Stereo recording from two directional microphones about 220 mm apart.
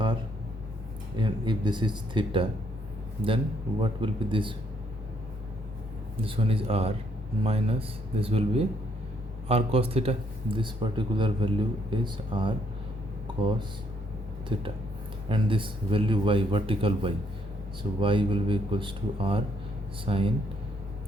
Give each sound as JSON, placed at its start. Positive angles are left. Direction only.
{"t": 1.1, "sound": "speech", "side_deg": -20}
{"t": 6.2, "sound": "speech", "side_deg": -25}
{"t": 14.5, "sound": "speech", "side_deg": -25}